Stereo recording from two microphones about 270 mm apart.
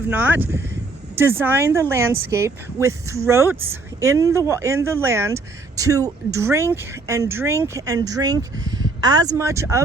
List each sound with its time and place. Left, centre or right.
0.1 s speech: centre
3.2 s speech: centre